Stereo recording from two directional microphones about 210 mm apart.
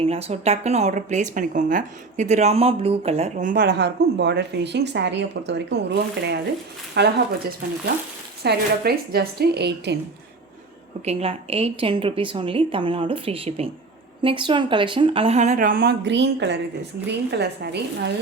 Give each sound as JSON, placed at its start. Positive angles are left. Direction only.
{"t": 0.0, "sound": "speech", "side_deg": -30}
{"t": 3.6, "sound": "a woman's voice", "side_deg": -55}
{"t": 8.4, "sound": "a woman's voice", "side_deg": -50}
{"t": 11.0, "sound": "a woman's voice", "side_deg": -30}